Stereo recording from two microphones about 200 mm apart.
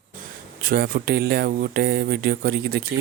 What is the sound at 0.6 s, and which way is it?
Speech, 45° right (ahead or behind).